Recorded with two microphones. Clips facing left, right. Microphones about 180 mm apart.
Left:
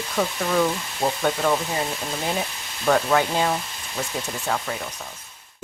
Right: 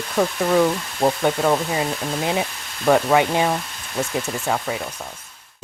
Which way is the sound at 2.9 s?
15° right (ahead or behind).